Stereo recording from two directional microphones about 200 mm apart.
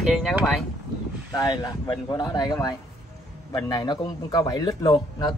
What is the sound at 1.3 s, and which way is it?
Speech, 20° left (ahead or behind).